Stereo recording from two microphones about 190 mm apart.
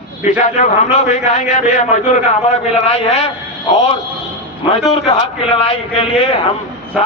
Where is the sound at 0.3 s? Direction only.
40° left (ahead or behind).